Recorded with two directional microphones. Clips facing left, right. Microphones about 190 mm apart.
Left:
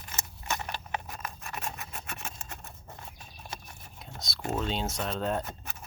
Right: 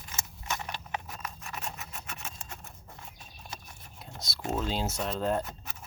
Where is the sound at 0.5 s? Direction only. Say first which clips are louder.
Left 1 dB; 55° left (ahead or behind).